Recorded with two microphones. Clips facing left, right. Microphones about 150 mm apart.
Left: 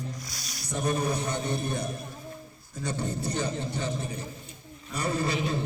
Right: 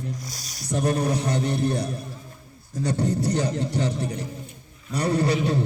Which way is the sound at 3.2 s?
75° right (ahead or behind).